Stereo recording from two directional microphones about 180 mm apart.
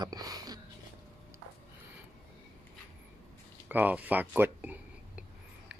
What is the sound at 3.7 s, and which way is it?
Speech, 10° right (ahead or behind).